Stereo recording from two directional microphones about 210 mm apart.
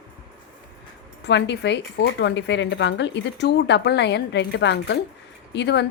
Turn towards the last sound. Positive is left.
turn(degrees=55)  # may be behind; listen again after turning